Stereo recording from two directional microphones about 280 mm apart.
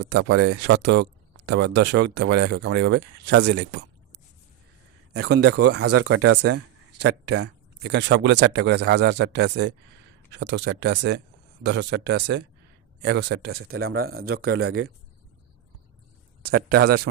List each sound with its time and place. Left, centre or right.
0.1 s speech: right
5.2 s speech: right
5.9 s speech: right
7.4 s speech: right
13.7 s speech: right
14.2 s speech: right
14.7 s speech: right
16.4 s speech: right